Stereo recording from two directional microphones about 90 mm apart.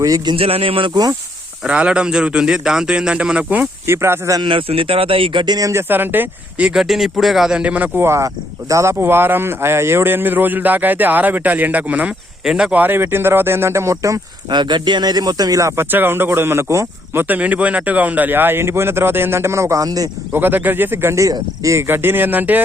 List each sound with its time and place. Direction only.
0.0 s speech: 40° right (ahead or behind)
0.3 s a man's voice: 90° right
1.6 s a man's voice: 10° right (ahead or behind)
3.8 s speech: 30° right (ahead or behind)
4.4 s speech: 75° right (ahead or behind)
5.5 s speech: 40° right (ahead or behind)
5.9 s speech: 25° right (ahead or behind)
6.7 s a man's voice: 5° right (ahead or behind)
12.8 s speech: 25° right (ahead or behind)
14.5 s speech: 55° right (ahead or behind)
20.3 s speech: 20° right (ahead or behind)